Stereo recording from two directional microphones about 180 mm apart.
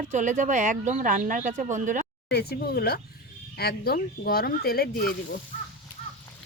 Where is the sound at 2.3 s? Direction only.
65° left (ahead or behind).